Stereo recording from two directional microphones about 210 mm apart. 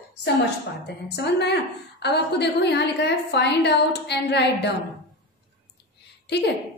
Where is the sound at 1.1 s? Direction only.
55° left (ahead or behind).